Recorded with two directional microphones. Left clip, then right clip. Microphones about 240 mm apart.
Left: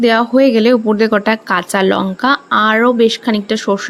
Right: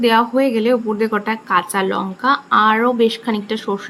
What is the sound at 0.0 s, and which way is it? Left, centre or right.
A woman's voice, centre.